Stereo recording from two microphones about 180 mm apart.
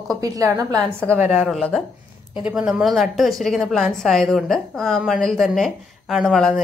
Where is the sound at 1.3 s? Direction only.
5° left (ahead or behind).